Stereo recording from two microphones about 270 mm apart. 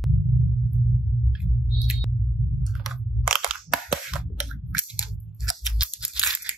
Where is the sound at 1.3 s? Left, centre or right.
Centre.